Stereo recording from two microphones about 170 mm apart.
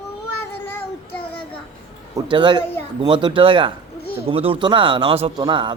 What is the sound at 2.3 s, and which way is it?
A man's voice, 30° right (ahead or behind).